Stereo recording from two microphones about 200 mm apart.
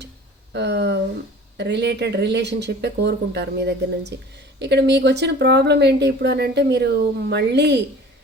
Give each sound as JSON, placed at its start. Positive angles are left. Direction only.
{"t": 0.5, "sound": "speech", "side_deg": -60}